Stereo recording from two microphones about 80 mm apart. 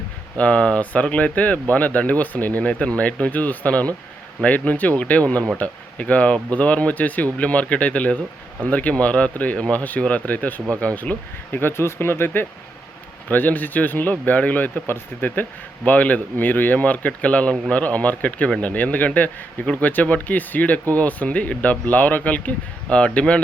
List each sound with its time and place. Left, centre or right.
0.3 s speech: centre